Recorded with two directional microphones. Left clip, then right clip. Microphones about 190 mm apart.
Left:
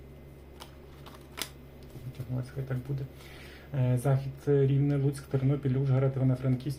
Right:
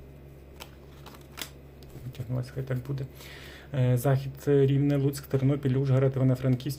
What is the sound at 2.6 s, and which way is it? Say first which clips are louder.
Speech: right 3 dB; 40° right (ahead or behind).